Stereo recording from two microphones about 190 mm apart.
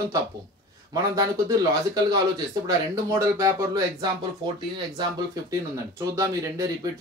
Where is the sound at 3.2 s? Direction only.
15° right (ahead or behind).